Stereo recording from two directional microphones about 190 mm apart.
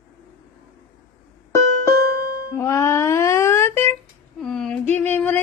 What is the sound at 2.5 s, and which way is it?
Music, 15° left (ahead or behind).